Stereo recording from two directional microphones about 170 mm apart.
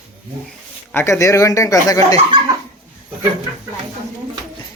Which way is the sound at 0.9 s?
15° left (ahead or behind).